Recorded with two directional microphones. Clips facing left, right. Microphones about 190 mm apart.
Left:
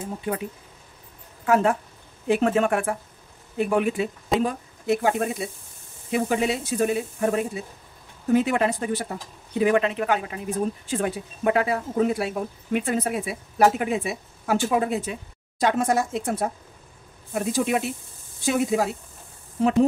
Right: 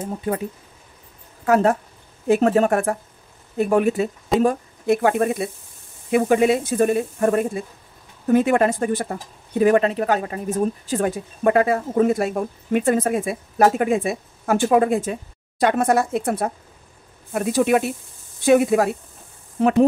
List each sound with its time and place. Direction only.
1.4 s speech: 40° right (ahead or behind)
15.6 s speech: 60° right (ahead or behind)